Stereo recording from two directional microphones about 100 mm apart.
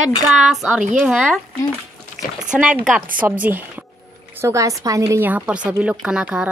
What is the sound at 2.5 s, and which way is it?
Speech, 10° right (ahead or behind).